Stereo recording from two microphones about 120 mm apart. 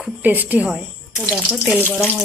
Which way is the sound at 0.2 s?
15° right (ahead or behind).